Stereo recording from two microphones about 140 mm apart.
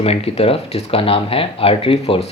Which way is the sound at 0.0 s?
45° left (ahead or behind).